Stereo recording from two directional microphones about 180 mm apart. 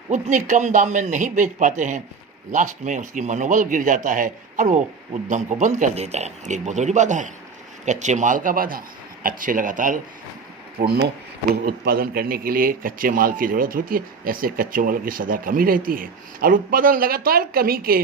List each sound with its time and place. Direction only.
0.1 s a man's voice: 45° right (ahead or behind)
10.8 s a man's voice: 65° right (ahead or behind)